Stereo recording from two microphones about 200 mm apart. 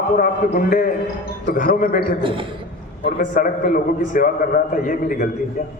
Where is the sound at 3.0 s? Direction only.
40° left (ahead or behind).